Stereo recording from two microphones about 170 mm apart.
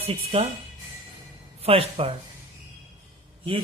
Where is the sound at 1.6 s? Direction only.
35° right (ahead or behind).